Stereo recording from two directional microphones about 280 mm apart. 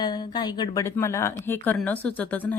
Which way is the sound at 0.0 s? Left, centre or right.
Centre.